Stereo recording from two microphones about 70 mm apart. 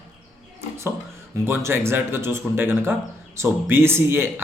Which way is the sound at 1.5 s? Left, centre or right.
Right.